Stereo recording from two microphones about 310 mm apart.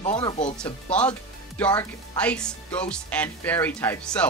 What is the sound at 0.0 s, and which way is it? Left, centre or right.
Speech, centre.